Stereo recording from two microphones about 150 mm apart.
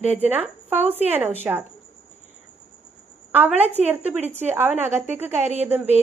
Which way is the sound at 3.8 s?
10° right (ahead or behind).